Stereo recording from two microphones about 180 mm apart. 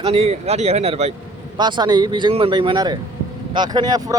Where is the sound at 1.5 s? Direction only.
25° right (ahead or behind).